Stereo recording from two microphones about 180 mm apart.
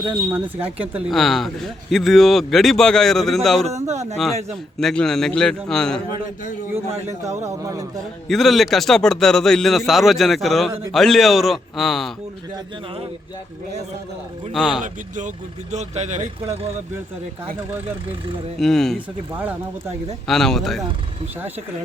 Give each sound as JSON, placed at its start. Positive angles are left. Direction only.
{"t": 0.1, "sound": "speech", "side_deg": -15}
{"t": 3.7, "sound": "speech", "side_deg": -40}
{"t": 4.8, "sound": "speech", "side_deg": 0}
{"t": 7.7, "sound": "a man's voice", "side_deg": -20}
{"t": 8.3, "sound": "speech", "side_deg": 0}
{"t": 14.5, "sound": "speech", "side_deg": 0}
{"t": 14.8, "sound": "speech", "side_deg": -45}
{"t": 18.6, "sound": "speech", "side_deg": 0}
{"t": 20.2, "sound": "speech", "side_deg": 0}